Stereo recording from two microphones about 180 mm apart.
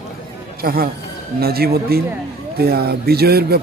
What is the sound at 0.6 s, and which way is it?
Speech, 55° right (ahead or behind).